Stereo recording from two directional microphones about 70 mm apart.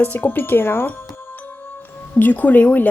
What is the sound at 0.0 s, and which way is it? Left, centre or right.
Speech, left.